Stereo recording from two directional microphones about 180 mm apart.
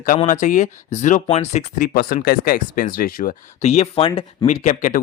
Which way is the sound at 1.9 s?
55° left (ahead or behind).